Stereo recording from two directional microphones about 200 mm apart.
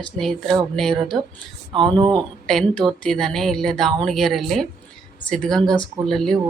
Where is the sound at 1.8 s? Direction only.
25° right (ahead or behind).